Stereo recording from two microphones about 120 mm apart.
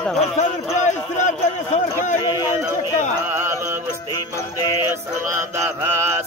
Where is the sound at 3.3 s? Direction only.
20° right (ahead or behind).